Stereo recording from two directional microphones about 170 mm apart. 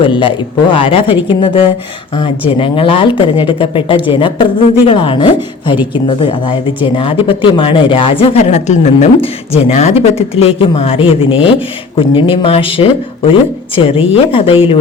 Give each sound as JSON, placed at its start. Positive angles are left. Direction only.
{"t": 0.0, "sound": "speech", "side_deg": 30}